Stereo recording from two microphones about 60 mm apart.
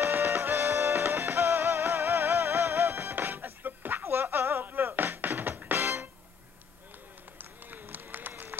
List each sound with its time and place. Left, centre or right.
0.0 s music: right
7.3 s run: right